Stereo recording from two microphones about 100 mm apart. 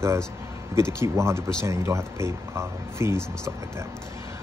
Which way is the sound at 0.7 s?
25° right (ahead or behind).